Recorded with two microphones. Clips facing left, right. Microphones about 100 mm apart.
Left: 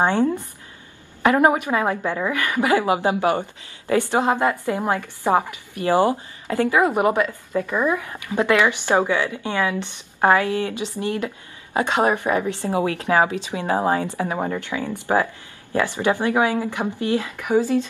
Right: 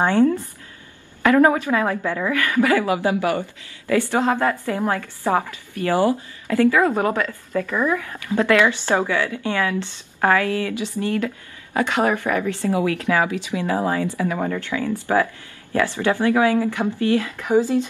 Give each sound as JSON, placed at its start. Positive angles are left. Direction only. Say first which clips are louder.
{"t": 0.0, "sound": "a woman's voice", "louder": "right 2 dB", "side_deg": 15}
{"t": 17.5, "sound": "speech", "louder": "right 1 dB", "side_deg": -15}